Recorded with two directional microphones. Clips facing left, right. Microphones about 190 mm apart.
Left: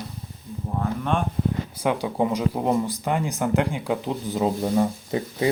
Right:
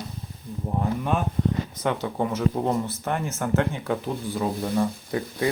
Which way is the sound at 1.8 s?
10° left (ahead or behind).